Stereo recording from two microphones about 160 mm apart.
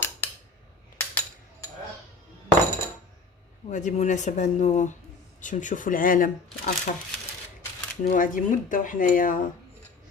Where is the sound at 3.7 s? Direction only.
50° left (ahead or behind).